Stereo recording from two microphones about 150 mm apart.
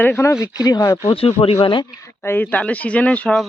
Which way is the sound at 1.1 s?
40° left (ahead or behind).